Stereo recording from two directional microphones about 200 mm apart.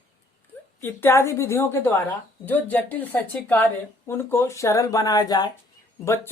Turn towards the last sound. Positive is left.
turn(degrees=10)  # may be behind; listen again after turning